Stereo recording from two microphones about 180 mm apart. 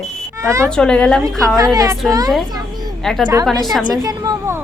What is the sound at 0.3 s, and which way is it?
Speech, 15° right (ahead or behind).